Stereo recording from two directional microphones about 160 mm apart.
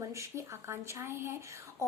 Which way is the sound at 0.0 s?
20° right (ahead or behind).